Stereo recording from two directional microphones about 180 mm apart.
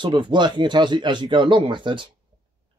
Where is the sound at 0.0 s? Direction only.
25° right (ahead or behind).